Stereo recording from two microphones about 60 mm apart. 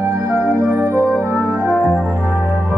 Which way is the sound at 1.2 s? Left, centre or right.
Left.